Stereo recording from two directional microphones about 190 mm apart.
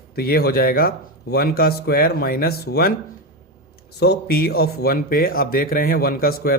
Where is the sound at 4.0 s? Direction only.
55° left (ahead or behind).